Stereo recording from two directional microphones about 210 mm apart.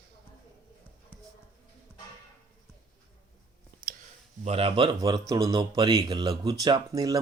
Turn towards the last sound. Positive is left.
turn(degrees=-15)  # may be behind; listen again after turning